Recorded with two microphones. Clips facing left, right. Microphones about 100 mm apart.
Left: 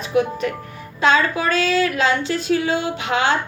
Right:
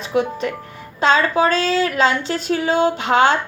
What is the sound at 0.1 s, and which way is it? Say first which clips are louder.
A woman's voice: even; 25° right (ahead or behind).